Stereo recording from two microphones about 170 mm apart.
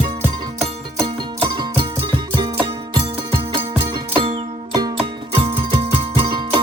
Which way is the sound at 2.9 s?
30° right (ahead or behind).